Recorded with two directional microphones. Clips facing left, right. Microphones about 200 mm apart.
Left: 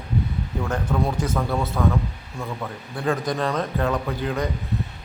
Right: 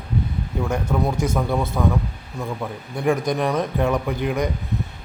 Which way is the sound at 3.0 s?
15° right (ahead or behind).